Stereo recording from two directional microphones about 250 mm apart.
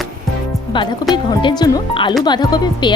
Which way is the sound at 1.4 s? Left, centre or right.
Centre.